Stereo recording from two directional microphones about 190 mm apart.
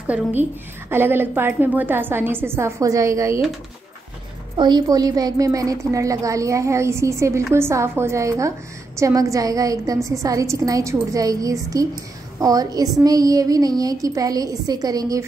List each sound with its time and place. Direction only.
0.0 s a woman's voice: 10° right (ahead or behind)
4.6 s a woman's voice: 20° right (ahead or behind)